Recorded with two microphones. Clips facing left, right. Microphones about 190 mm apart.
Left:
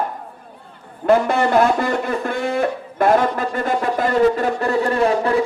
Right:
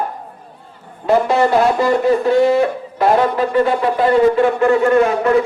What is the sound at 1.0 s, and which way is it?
Speech, 55° left (ahead or behind).